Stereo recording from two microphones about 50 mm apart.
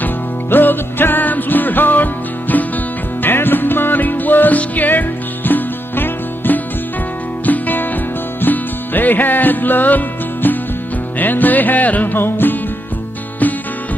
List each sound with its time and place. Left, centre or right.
0.0 s music: left
12.2 s music: left